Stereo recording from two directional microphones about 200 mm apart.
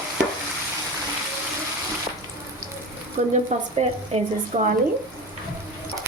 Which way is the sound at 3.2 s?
35° right (ahead or behind).